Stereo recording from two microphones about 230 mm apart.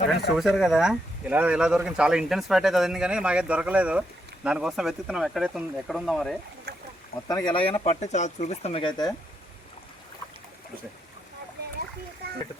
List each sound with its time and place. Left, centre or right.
0.1 s speech: centre
6.7 s a sound: right
7.3 s speech: centre